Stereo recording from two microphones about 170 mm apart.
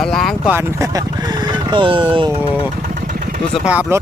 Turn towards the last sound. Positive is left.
turn(degrees=-10)  # may be behind; listen again after turning